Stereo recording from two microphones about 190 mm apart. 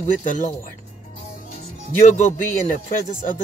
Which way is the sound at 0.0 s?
40° left (ahead or behind).